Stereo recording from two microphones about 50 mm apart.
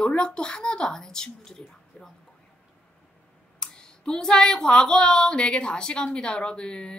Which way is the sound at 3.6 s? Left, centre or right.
Centre.